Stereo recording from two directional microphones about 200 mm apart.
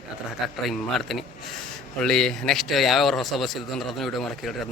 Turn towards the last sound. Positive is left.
turn(degrees=0)  # may be behind; listen again after turning